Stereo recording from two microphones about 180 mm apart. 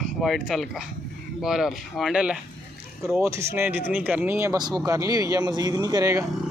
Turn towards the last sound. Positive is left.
turn(degrees=-20)  # may be behind; listen again after turning